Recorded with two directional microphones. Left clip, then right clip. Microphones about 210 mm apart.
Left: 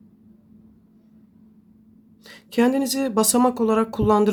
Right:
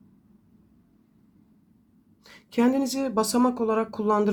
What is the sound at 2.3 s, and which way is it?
Speech, 5° left (ahead or behind).